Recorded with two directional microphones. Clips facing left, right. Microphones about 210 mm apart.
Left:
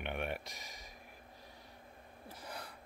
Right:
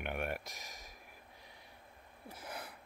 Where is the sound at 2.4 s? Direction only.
5° right (ahead or behind).